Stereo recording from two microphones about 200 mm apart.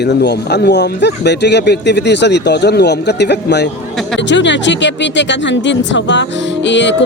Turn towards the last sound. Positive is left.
turn(degrees=65)  # may be behind; listen again after turning